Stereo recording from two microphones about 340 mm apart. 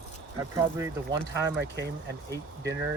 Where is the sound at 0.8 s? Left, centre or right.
Centre.